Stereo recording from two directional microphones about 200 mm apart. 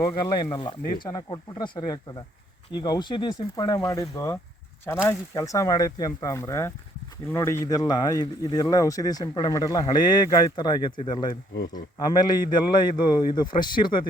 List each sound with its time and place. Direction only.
0.0 s speech: 20° left (ahead or behind)